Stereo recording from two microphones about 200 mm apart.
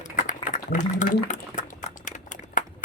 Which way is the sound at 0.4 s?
40° left (ahead or behind).